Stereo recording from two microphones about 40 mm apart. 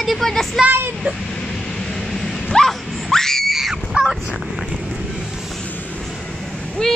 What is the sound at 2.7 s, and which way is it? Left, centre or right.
Screaming, centre.